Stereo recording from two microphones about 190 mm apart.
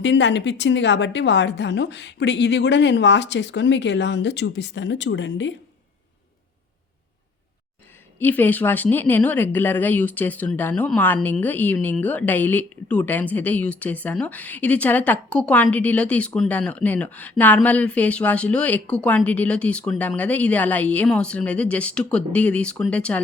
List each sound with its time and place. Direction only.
0.0 s a woman's voice: 70° left (ahead or behind)
8.2 s speech: 10° left (ahead or behind)